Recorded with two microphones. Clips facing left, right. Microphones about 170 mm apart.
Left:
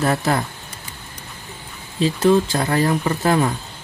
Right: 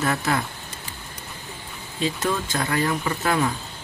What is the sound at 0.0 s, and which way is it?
Speech, 35° left (ahead or behind).